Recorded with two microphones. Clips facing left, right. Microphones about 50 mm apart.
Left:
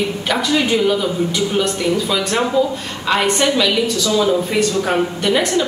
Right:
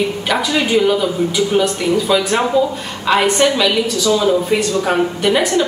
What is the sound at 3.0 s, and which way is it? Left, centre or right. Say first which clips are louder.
Speech: right 3 dB; centre.